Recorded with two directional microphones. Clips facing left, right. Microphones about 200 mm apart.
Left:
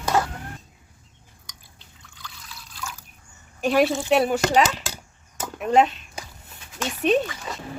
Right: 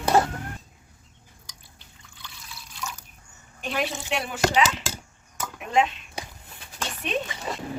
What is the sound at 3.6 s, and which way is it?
Speech, 40° left (ahead or behind).